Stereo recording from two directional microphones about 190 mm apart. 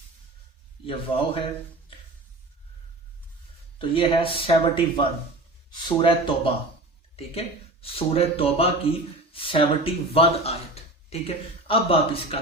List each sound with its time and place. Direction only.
0.9 s speech: 30° left (ahead or behind)
3.8 s speech: 25° left (ahead or behind)